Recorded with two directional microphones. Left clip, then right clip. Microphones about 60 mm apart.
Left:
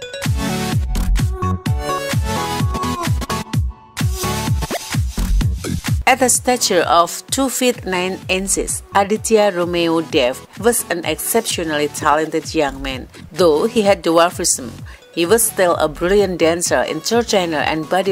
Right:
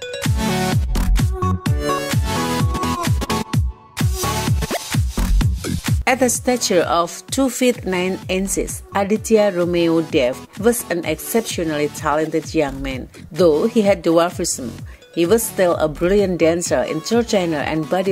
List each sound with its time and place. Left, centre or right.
0.0 s music: centre
6.0 s speech: left